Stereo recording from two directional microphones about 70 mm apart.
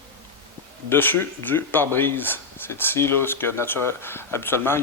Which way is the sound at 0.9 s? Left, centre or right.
Left.